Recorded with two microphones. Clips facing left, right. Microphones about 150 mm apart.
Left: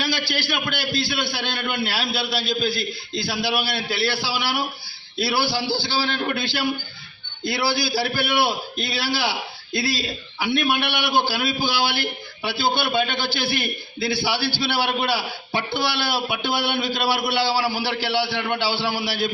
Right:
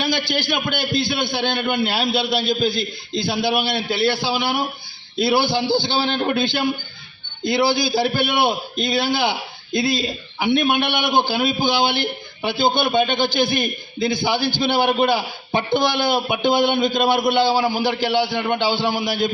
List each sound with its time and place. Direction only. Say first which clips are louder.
0.0 s a man's voice: right 4 dB; 20° right (ahead or behind)